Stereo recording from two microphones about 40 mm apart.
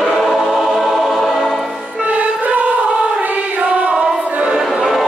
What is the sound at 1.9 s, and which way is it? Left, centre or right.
Music, right.